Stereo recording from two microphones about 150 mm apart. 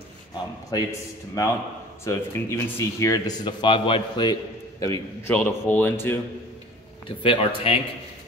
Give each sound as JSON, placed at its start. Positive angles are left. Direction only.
{"t": 0.7, "sound": "speech", "side_deg": 25}
{"t": 5.2, "sound": "speech", "side_deg": 10}
{"t": 7.1, "sound": "a man's voice", "side_deg": 35}